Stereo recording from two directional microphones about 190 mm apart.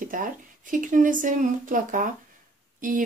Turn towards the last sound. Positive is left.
turn(degrees=-45)  # may be behind; listen again after turning